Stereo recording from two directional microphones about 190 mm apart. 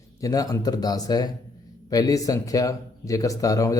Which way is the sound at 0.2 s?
20° left (ahead or behind).